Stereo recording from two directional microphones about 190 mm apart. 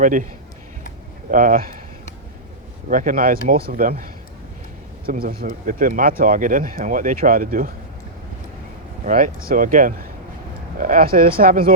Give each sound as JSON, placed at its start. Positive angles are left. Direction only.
{"t": 0.0, "sound": "speech", "side_deg": -45}
{"t": 1.3, "sound": "speech", "side_deg": -45}
{"t": 2.9, "sound": "speech", "side_deg": -45}
{"t": 9.0, "sound": "speech", "side_deg": -45}